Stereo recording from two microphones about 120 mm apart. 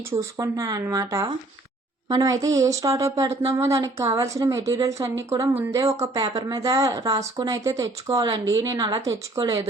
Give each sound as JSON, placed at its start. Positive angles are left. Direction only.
{"t": 0.3, "sound": "a woman's voice", "side_deg": -30}